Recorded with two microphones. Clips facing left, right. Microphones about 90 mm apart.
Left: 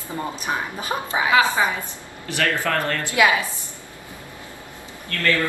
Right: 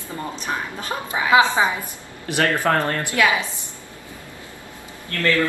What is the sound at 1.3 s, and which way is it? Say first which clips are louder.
Speech: right 3 dB; 25° right (ahead or behind).